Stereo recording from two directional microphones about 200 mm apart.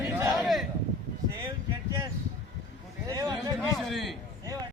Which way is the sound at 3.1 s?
15° right (ahead or behind).